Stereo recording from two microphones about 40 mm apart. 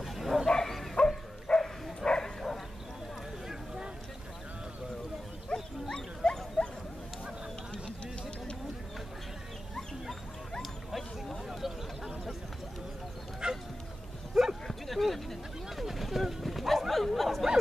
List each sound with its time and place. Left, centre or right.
0.0 s bow-wow: centre
0.5 s bow-wow: centre
0.9 s dog: left
2.0 s bow-wow: centre
3.4 s a sound: centre
5.5 s bow-wow: centre
10.6 s a sound: centre
13.4 s dog: right
14.3 s bow-wow: centre
14.7 s a sound: centre